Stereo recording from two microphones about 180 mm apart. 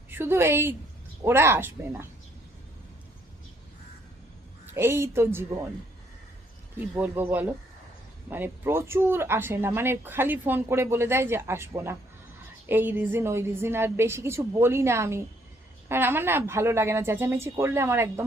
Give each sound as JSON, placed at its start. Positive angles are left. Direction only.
{"t": 0.1, "sound": "speech", "side_deg": -15}
{"t": 4.6, "sound": "speech", "side_deg": -15}
{"t": 6.7, "sound": "speech", "side_deg": -10}